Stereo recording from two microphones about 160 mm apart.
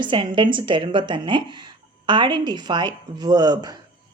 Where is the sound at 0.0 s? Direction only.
30° right (ahead or behind).